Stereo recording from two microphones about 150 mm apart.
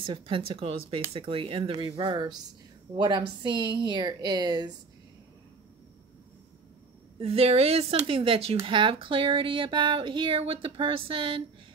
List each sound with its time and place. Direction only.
0.0 s speech: 35° right (ahead or behind)
7.2 s speech: 40° right (ahead or behind)